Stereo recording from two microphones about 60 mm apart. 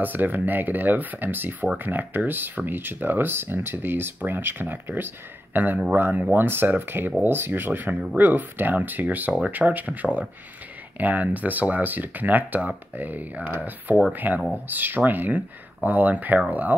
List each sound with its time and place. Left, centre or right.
0.0 s speech: right
7.9 s speech: centre
8.2 s speech: right
11.0 s speech: right